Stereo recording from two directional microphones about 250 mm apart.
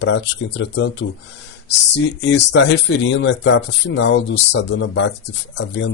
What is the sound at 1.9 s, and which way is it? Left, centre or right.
Speech, left.